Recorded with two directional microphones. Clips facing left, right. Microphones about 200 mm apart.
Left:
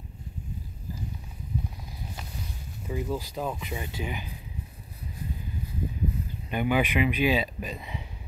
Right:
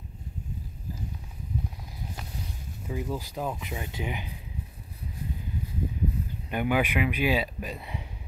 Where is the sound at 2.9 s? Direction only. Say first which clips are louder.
Left 2 dB; 5° right (ahead or behind).